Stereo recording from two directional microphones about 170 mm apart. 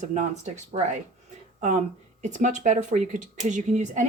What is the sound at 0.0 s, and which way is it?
Speech, 45° right (ahead or behind).